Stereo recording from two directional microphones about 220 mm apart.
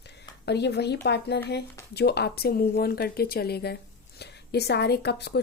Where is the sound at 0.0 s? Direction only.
50° left (ahead or behind).